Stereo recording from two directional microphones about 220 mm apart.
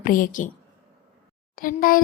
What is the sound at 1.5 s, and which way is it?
Speech, 40° left (ahead or behind).